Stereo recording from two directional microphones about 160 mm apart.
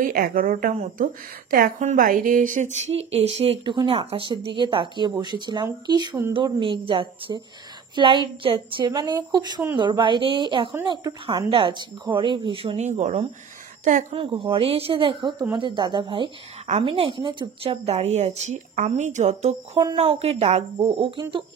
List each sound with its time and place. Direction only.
0.0 s a woman's voice: 60° right (ahead or behind); by 12.7 s 30° right (ahead or behind)
12.7 s a woman's voice: 45° right (ahead or behind)
14.1 s a woman's voice: 35° right (ahead or behind)
19.8 s speech: 30° right (ahead or behind)